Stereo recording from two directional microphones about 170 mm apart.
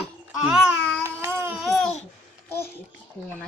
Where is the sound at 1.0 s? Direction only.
15° right (ahead or behind).